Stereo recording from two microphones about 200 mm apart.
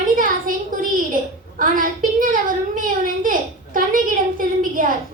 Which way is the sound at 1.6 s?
45° right (ahead or behind).